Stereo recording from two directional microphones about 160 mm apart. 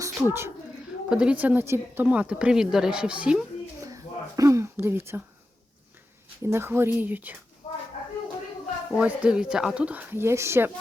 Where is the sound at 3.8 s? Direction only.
20° right (ahead or behind).